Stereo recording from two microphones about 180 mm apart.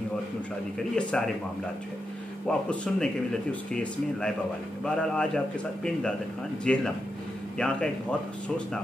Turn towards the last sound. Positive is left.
turn(degrees=5)  # may be behind; listen again after turning